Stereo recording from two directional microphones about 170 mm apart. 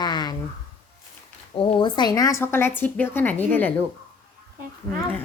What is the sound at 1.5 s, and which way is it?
A woman's voice, 30° left (ahead or behind).